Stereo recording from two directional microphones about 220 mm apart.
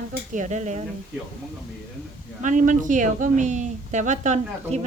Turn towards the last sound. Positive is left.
turn(degrees=-35)  # may be behind; listen again after turning